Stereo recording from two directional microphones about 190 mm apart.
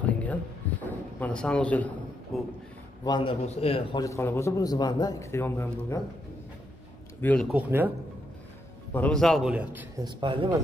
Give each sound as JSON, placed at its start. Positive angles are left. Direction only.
{"t": 0.0, "sound": "a sound", "side_deg": 10}
{"t": 1.2, "sound": "a man's voice", "side_deg": 5}
{"t": 3.0, "sound": "a man's voice", "side_deg": 25}
{"t": 4.0, "sound": "a man's voice", "side_deg": 15}
{"t": 7.2, "sound": "speech", "side_deg": 10}
{"t": 7.5, "sound": "speech", "side_deg": -10}
{"t": 8.9, "sound": "a man's voice", "side_deg": 5}
{"t": 10.0, "sound": "speech", "side_deg": -25}